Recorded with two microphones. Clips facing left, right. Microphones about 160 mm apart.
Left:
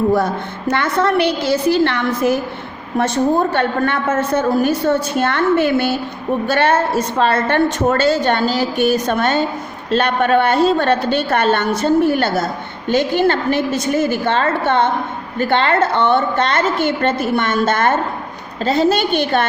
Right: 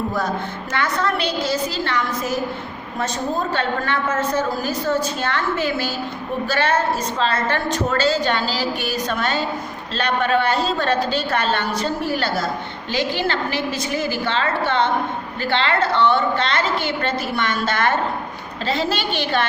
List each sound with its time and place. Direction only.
1.2 s a woman's voice: 60° left (ahead or behind); by 19.5 s 45° left (ahead or behind)